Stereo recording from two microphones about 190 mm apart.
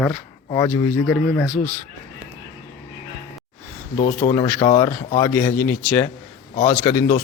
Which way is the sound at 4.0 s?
45° left (ahead or behind).